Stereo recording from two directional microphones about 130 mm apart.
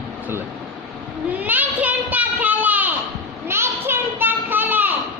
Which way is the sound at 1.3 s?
10° right (ahead or behind).